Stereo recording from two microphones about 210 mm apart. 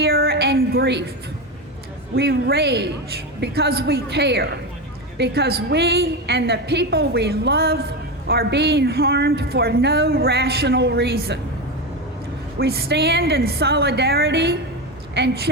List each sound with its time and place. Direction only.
0.0 s a sound: 50° right (ahead or behind)
2.1 s speech: 50° right (ahead or behind)
12.5 s speech: 50° right (ahead or behind)